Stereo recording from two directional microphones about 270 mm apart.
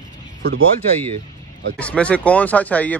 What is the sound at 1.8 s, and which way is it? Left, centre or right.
Speech, centre.